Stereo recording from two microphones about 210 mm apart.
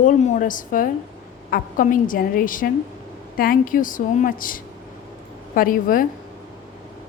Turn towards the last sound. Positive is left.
turn(degrees=40)  # may be behind; listen again after turning